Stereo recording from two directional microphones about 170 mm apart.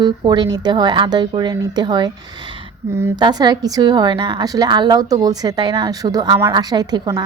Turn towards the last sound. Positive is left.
turn(degrees=-25)  # may be behind; listen again after turning